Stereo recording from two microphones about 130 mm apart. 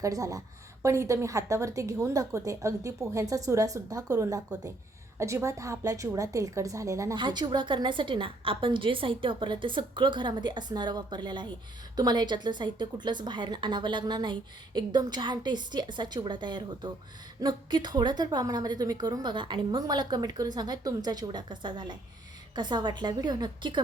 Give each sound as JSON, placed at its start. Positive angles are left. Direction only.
{"t": 0.0, "sound": "a woman's voice", "side_deg": -25}
{"t": 7.2, "sound": "a woman's voice", "side_deg": -35}